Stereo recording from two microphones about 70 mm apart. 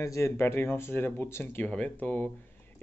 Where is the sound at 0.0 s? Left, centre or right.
Left.